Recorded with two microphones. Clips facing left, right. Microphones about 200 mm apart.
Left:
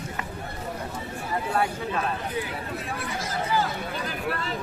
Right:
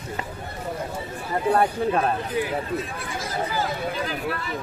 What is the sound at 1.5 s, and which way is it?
Speech, 50° right (ahead or behind).